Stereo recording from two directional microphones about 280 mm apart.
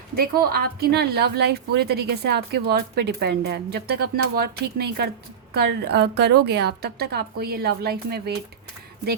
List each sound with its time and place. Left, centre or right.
0.2 s a woman's voice: right